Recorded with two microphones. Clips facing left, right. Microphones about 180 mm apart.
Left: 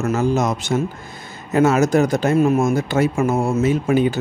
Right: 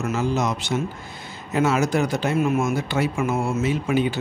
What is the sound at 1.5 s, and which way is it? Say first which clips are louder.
Speech: left 5 dB; 45° left (ahead or behind).